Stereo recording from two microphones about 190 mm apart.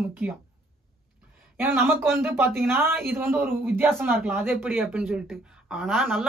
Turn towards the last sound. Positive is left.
turn(degrees=0)  # may be behind; listen again after turning